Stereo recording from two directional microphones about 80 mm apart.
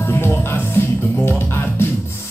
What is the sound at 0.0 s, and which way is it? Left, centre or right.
Music, left.